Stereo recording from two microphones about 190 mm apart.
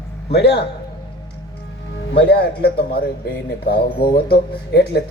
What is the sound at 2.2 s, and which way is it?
Speech, 60° left (ahead or behind).